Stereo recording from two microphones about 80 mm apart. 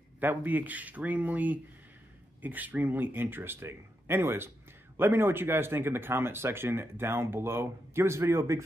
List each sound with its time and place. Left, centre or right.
0.2 s speech: right